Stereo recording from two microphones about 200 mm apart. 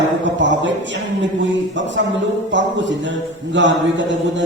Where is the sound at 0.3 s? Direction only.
65° right (ahead or behind).